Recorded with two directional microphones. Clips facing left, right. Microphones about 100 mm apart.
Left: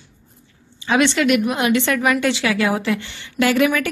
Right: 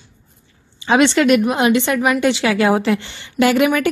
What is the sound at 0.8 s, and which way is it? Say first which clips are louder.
A woman's voice: right 3 dB; 25° right (ahead or behind).